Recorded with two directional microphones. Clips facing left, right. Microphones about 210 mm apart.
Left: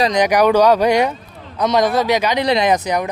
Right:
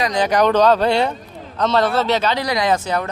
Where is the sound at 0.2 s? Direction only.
10° left (ahead or behind).